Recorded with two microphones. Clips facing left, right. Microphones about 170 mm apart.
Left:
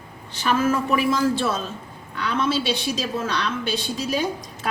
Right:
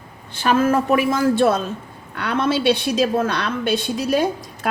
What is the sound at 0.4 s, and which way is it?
A woman's voice, 55° right (ahead or behind).